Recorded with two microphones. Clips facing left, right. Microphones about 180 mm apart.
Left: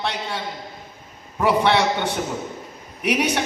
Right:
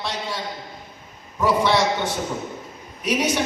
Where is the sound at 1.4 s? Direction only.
65° left (ahead or behind).